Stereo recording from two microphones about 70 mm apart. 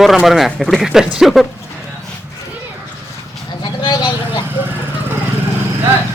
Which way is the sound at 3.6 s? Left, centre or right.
Left.